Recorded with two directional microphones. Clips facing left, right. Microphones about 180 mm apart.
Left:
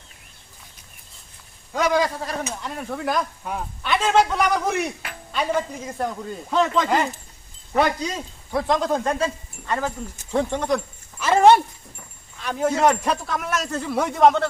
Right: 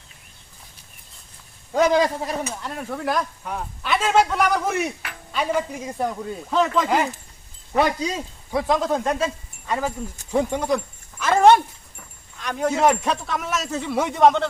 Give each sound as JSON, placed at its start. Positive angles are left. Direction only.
{"t": 1.7, "sound": "a man's voice", "side_deg": -25}
{"t": 2.5, "sound": "speech", "side_deg": 0}
{"t": 11.2, "sound": "dog", "side_deg": 10}
{"t": 12.4, "sound": "speech", "side_deg": 5}